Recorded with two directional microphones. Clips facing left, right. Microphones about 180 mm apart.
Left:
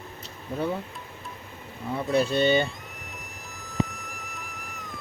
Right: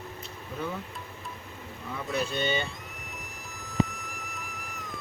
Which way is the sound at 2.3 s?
35° left (ahead or behind).